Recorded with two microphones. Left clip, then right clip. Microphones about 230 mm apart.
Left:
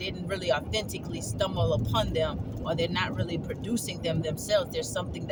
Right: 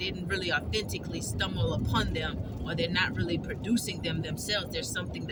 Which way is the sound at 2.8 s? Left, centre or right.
Left.